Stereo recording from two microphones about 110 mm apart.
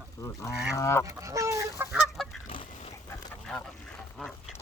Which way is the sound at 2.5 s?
55° left (ahead or behind).